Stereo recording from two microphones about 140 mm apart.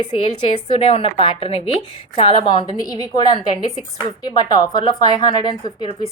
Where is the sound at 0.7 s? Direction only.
40° left (ahead or behind).